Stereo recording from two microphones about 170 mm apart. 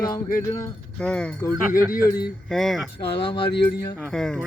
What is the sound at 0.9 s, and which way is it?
Speech, 10° left (ahead or behind).